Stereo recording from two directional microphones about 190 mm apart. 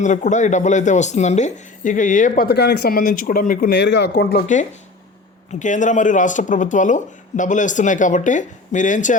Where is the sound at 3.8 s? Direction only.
65° left (ahead or behind).